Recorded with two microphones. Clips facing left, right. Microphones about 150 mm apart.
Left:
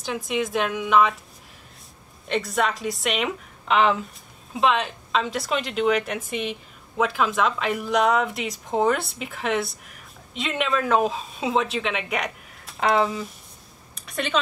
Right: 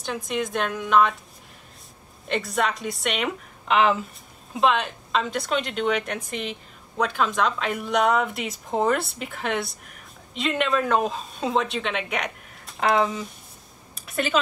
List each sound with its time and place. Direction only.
0.0 s speech: centre (ahead or behind)
2.2 s speech: centre (ahead or behind)
13.9 s a sound: 5° right (ahead or behind)